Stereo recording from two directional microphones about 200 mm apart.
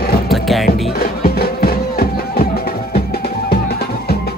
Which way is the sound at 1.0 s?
50° left (ahead or behind).